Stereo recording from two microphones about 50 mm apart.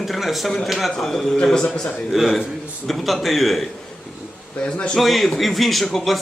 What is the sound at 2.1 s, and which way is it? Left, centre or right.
Speech, centre.